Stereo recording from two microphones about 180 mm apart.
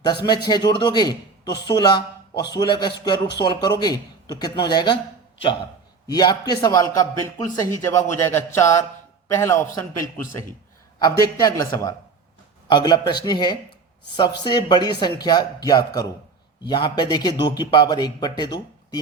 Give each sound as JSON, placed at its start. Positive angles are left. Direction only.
{"t": 0.0, "sound": "a man's voice", "side_deg": 25}
{"t": 6.1, "sound": "a man's voice", "side_deg": 20}